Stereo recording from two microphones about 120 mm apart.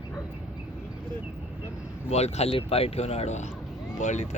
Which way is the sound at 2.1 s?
65° left (ahead or behind).